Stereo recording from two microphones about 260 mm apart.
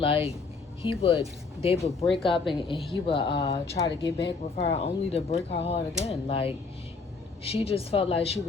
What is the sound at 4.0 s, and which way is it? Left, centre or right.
Speech, left.